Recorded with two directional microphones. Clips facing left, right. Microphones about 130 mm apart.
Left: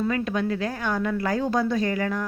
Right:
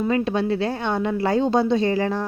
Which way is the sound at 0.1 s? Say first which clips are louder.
Right 4 dB; 25° right (ahead or behind).